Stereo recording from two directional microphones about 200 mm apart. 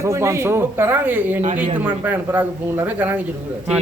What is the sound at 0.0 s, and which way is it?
Speech, 15° right (ahead or behind).